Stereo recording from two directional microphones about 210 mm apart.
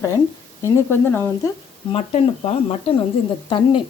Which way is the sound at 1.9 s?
30° left (ahead or behind).